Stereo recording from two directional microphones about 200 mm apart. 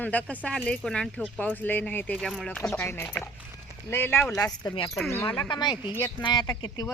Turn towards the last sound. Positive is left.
turn(degrees=15)  # may be behind; listen again after turning